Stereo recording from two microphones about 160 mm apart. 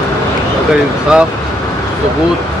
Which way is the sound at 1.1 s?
5° right (ahead or behind).